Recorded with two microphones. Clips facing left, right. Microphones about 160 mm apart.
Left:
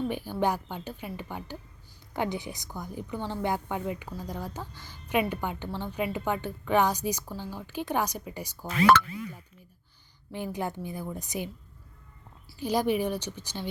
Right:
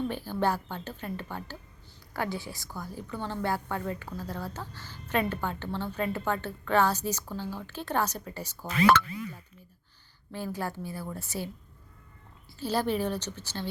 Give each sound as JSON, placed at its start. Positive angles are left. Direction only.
{"t": 0.1, "sound": "a woman's voice", "side_deg": 15}
{"t": 10.3, "sound": "a woman's voice", "side_deg": 20}
{"t": 12.5, "sound": "a woman's voice", "side_deg": 15}